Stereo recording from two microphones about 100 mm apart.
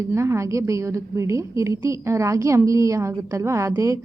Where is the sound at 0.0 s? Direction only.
30° right (ahead or behind).